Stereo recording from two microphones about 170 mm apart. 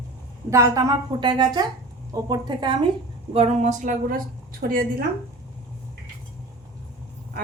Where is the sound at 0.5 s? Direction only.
15° right (ahead or behind).